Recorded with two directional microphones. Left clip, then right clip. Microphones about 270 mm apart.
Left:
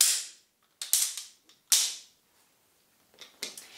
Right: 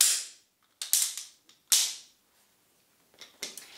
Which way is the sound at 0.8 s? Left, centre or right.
Centre.